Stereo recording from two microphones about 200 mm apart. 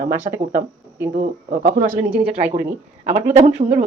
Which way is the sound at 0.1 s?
10° right (ahead or behind).